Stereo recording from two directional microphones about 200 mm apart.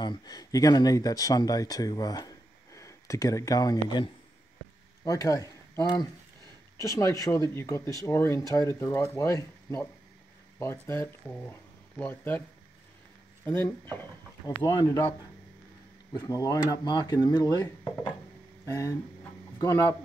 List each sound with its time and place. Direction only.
0.0 s speech: 20° left (ahead or behind)
13.5 s speech: 10° left (ahead or behind)
17.8 s speech: 5° left (ahead or behind)
18.7 s speech: 15° left (ahead or behind)